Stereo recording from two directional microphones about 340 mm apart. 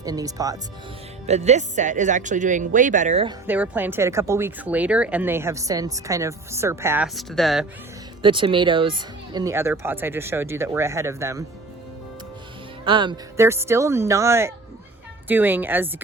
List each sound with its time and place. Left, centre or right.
0.0 s speech: centre
3.4 s speech: centre
8.2 s speech: centre
12.8 s a woman's voice: centre